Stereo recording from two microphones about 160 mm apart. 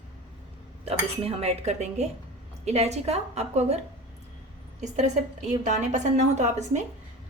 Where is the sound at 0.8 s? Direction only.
40° right (ahead or behind).